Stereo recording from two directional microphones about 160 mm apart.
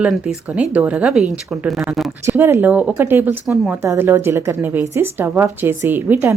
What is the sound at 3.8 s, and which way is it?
A woman's voice, 15° right (ahead or behind).